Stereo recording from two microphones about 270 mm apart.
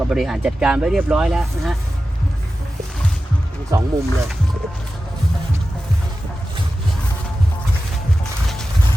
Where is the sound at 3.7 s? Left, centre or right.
Centre.